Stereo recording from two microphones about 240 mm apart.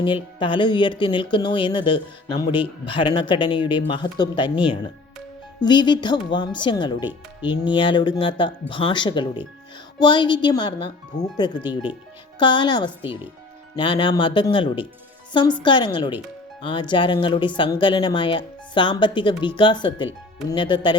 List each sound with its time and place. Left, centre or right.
0.0 s speech: left
7.0 s speech: centre
7.5 s speech: centre